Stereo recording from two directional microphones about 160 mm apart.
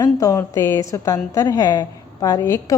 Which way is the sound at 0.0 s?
20° left (ahead or behind).